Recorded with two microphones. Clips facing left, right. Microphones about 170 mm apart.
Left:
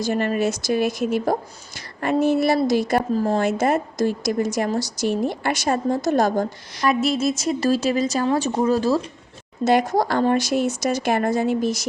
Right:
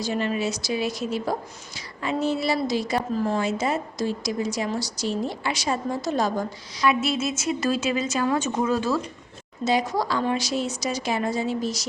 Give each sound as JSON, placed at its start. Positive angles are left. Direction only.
{"t": 0.0, "sound": "a woman's voice", "side_deg": 50}
{"t": 9.6, "sound": "speech", "side_deg": 50}